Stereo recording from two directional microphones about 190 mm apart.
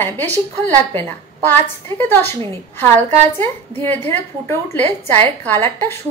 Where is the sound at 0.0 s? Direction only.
10° left (ahead or behind).